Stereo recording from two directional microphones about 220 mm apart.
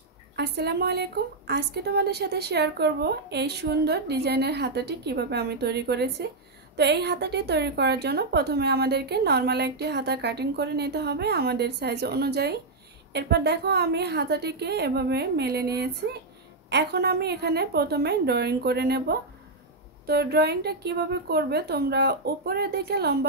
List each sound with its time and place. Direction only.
0.4 s a woman's voice: 50° right (ahead or behind)